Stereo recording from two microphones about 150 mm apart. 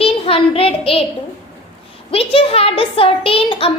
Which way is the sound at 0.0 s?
40° left (ahead or behind).